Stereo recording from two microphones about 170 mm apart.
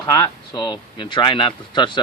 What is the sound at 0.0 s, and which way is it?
Speech, 25° left (ahead or behind).